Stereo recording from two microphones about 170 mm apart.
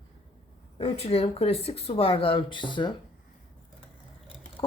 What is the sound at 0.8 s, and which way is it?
Speech, 35° left (ahead or behind).